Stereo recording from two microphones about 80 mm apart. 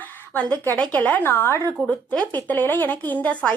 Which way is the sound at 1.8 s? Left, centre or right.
Centre.